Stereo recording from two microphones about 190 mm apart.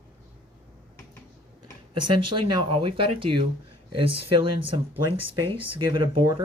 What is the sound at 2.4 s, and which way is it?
Speech, 25° right (ahead or behind).